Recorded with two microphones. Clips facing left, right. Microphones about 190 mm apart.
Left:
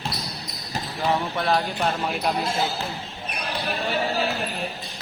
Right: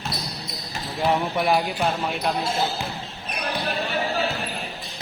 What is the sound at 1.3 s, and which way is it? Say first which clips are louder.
Speech: right 2 dB; 10° right (ahead or behind).